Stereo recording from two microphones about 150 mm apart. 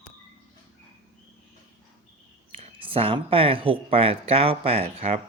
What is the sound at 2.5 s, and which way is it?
Speech, 35° right (ahead or behind).